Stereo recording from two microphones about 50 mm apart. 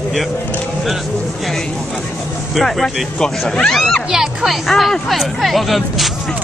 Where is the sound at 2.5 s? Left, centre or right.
Centre.